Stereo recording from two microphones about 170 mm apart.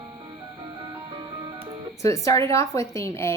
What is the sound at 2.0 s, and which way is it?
A woman's voice, 20° left (ahead or behind).